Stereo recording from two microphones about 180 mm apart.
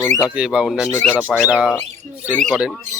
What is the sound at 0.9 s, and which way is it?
Speech, 10° left (ahead or behind).